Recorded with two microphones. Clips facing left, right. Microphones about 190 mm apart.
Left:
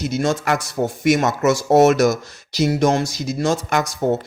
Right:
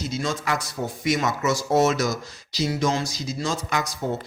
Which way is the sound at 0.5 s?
65° left (ahead or behind).